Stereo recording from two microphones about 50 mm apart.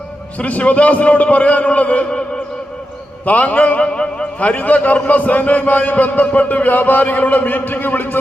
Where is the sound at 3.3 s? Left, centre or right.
Left.